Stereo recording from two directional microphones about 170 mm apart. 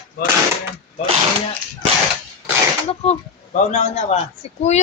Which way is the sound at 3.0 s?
35° left (ahead or behind).